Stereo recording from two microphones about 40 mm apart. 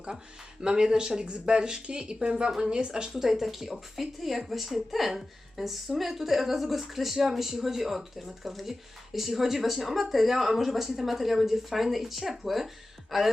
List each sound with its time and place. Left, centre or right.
0.6 s speech: centre
3.2 s speech: centre